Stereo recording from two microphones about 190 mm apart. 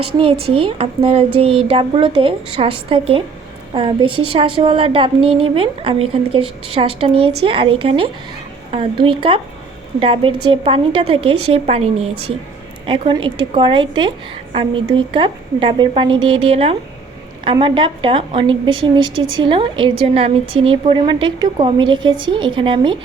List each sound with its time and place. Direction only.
0.0 s speech: 30° right (ahead or behind)